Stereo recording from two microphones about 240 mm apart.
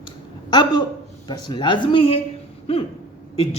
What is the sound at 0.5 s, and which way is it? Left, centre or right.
A man's voice, centre.